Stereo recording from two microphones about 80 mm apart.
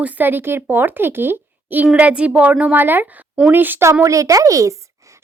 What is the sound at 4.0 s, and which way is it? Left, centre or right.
Speech, right.